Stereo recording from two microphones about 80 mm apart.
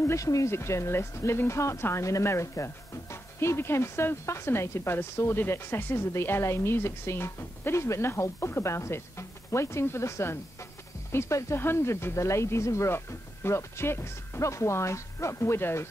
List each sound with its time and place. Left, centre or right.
0.0 s speech: left